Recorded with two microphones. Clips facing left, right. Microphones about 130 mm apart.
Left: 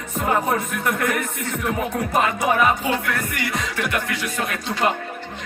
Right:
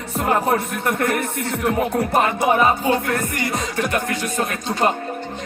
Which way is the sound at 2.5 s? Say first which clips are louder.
Right 2 dB; 30° right (ahead or behind).